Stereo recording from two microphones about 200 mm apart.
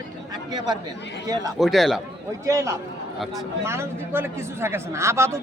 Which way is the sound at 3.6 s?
15° right (ahead or behind).